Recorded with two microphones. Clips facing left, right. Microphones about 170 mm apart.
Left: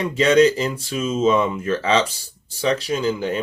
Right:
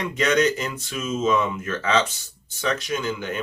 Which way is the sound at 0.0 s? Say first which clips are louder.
Left 6 dB; 30° left (ahead or behind).